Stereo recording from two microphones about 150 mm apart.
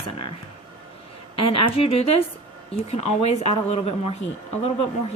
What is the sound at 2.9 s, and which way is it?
Speech, 45° left (ahead or behind).